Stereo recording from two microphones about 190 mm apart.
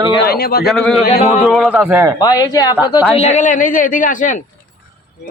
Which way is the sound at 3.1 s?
35° left (ahead or behind).